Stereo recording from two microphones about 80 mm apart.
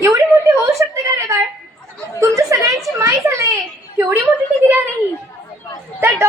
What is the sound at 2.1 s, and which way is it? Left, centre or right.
Chatter, right.